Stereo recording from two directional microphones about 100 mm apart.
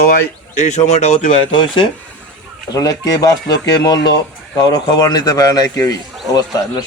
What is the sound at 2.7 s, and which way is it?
Speech, 35° left (ahead or behind).